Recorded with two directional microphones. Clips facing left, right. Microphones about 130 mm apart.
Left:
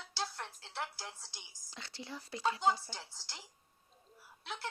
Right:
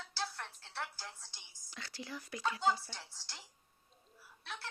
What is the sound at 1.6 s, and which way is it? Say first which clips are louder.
Speech: right 1 dB; 25° left (ahead or behind).